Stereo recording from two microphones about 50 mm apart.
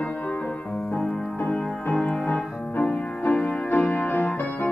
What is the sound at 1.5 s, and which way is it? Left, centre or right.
Music, left.